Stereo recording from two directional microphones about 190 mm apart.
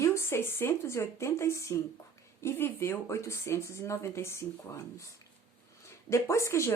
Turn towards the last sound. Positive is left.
turn(degrees=15)  # may be behind; listen again after turning